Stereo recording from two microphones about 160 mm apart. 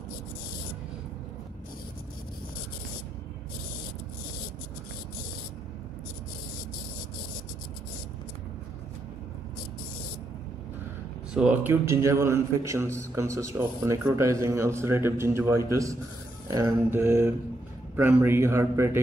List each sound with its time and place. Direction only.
11.3 s a man's voice: 5° right (ahead or behind)
11.7 s a man's voice: 15° right (ahead or behind)